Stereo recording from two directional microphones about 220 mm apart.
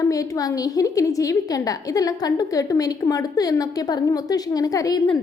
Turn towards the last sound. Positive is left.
turn(degrees=15)  # may be behind; listen again after turning